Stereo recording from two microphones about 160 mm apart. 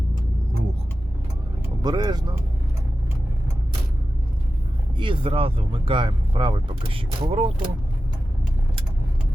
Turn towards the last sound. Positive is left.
turn(degrees=-40)  # may be behind; listen again after turning